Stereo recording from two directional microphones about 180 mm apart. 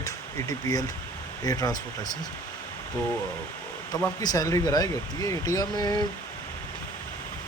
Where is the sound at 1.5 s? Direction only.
20° left (ahead or behind).